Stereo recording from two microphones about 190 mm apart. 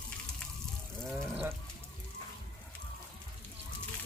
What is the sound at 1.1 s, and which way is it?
Livestock, 10° right (ahead or behind).